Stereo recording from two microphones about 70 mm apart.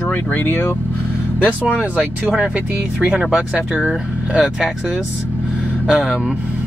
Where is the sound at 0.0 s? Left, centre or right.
Left.